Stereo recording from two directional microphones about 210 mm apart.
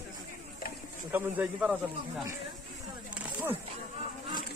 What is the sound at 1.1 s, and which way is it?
Speech, 10° right (ahead or behind).